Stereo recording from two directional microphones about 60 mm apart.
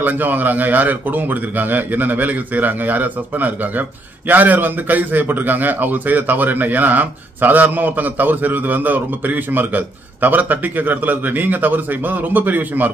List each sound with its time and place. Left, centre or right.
0.0 s a man's voice: right